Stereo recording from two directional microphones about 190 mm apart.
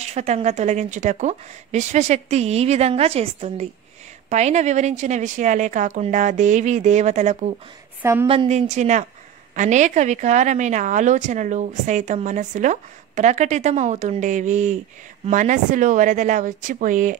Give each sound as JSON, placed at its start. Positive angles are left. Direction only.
{"t": 0.0, "sound": "a woman's voice", "side_deg": -35}
{"t": 8.0, "sound": "a woman's voice", "side_deg": -10}
{"t": 8.3, "sound": "a woman's voice", "side_deg": -35}